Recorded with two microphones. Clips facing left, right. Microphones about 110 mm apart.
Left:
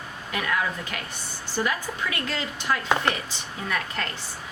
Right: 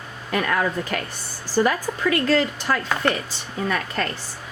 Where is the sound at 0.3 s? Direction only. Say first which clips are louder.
Right 5 dB; 45° right (ahead or behind).